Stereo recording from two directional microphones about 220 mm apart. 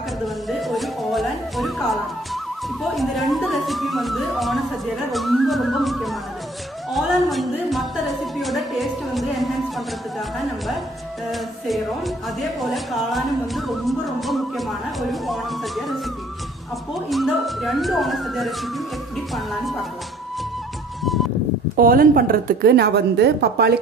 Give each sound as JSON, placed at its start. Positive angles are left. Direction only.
{"t": 0.5, "sound": "music", "side_deg": 0}
{"t": 2.8, "sound": "speech", "side_deg": 0}
{"t": 11.3, "sound": "speech", "side_deg": 0}
{"t": 17.1, "sound": "speech", "side_deg": 0}
{"t": 21.7, "sound": "a woman's voice", "side_deg": -40}